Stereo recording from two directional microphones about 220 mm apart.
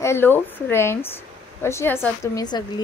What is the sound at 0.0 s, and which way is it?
Speech, 10° left (ahead or behind).